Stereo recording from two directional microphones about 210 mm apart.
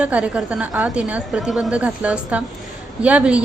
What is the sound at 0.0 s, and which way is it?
A woman's voice, 5° right (ahead or behind).